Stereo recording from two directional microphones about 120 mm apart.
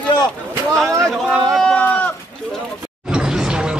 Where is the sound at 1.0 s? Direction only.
Centre (ahead or behind).